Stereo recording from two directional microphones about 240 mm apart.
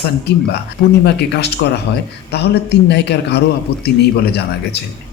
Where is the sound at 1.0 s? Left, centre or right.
Left.